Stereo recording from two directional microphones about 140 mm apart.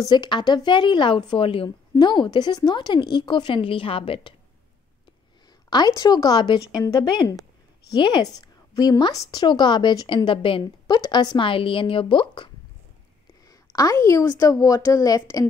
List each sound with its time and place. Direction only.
0.0 s a woman's voice: 30° left (ahead or behind)
5.7 s a woman's voice: 30° left (ahead or behind)
13.5 s a woman's voice: 25° left (ahead or behind)